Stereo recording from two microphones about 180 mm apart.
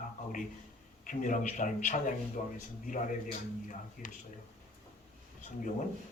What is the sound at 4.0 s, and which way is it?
Speech, 50° left (ahead or behind).